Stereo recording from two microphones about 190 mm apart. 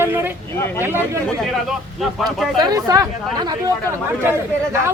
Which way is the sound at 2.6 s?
20° right (ahead or behind).